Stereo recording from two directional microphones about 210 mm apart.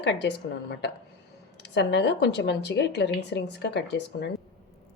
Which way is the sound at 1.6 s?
55° left (ahead or behind).